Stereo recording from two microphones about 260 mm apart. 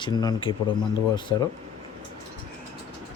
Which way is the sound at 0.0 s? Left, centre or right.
Centre.